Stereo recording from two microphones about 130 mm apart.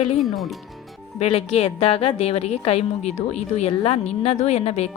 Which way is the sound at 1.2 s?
50° left (ahead or behind).